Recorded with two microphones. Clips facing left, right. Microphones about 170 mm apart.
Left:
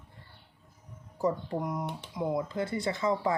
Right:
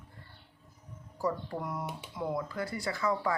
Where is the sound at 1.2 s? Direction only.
20° left (ahead or behind).